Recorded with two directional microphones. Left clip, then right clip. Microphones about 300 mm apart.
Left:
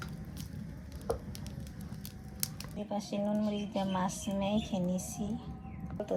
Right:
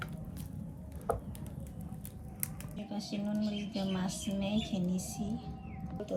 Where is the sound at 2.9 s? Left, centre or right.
Centre.